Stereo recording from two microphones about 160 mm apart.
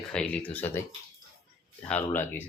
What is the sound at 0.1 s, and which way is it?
Speech, 5° left (ahead or behind).